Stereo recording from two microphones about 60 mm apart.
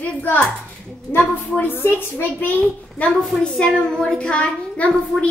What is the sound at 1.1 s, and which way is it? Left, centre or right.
Speech, centre.